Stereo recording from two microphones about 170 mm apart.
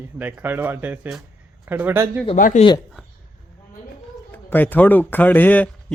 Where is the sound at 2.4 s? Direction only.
50° left (ahead or behind).